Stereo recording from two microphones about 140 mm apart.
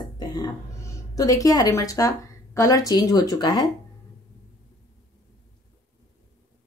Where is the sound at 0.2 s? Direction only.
30° left (ahead or behind).